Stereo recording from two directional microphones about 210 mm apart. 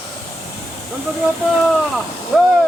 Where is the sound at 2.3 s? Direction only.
Centre (ahead or behind).